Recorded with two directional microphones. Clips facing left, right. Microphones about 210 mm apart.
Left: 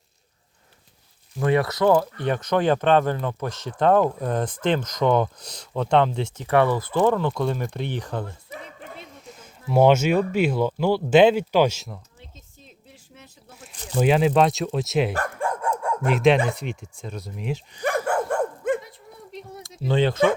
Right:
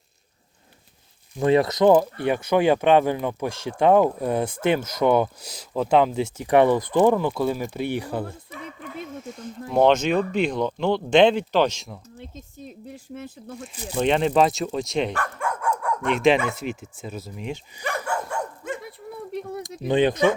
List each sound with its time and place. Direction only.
1.4 s speech: 20° right (ahead or behind); by 11.9 s 5° left (ahead or behind)
12.6 s a sound: 50° right (ahead or behind)
13.7 s speech: 10° right (ahead or behind)
14.0 s speech: 5° left (ahead or behind)
15.1 s dog: 35° left (ahead or behind)
16.0 s speech: centre (ahead or behind)
17.8 s dog: 50° left (ahead or behind)
18.8 s a sound: 60° right (ahead or behind)
19.8 s speech: 15° right (ahead or behind)